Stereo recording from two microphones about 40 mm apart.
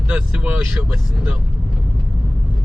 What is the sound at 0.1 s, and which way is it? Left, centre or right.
Speech, right.